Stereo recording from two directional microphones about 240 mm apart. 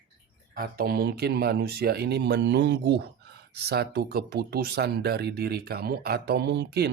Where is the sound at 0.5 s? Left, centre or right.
Right.